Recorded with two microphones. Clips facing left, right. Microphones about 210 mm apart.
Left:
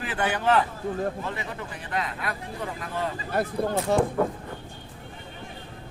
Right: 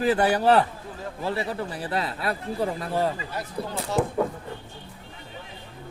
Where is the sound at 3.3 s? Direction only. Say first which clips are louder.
Left 6 dB; 55° left (ahead or behind).